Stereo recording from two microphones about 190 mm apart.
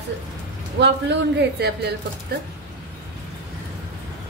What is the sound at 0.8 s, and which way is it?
Speech, 65° right (ahead or behind).